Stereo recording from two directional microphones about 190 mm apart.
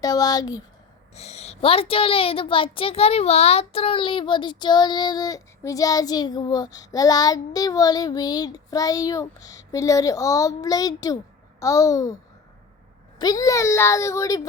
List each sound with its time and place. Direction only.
0.0 s a woman's voice: 20° left (ahead or behind)
1.1 s a woman's voice: 35° left (ahead or behind); by 12.1 s 15° left (ahead or behind)
13.1 s speech: 20° left (ahead or behind)